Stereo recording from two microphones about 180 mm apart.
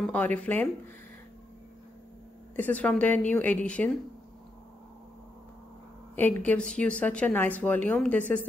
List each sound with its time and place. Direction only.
0.0 s a woman's voice: 10° left (ahead or behind)
2.5 s a woman's voice: 10° left (ahead or behind)
6.4 s a woman's voice: 5° left (ahead or behind)